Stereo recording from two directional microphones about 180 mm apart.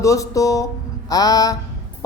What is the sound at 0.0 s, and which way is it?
Speech, 20° left (ahead or behind).